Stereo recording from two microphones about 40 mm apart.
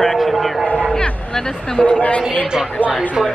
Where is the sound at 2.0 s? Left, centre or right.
Left.